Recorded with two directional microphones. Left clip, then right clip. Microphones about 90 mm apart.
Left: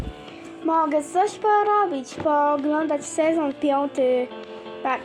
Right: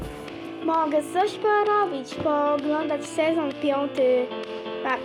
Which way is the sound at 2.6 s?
85° left.